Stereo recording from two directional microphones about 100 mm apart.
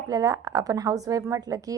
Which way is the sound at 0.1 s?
35° right (ahead or behind).